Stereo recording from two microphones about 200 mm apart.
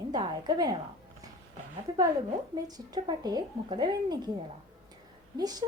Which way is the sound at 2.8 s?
20° right (ahead or behind).